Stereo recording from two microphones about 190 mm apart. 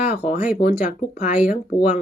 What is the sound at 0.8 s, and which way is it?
Speech, 50° left (ahead or behind).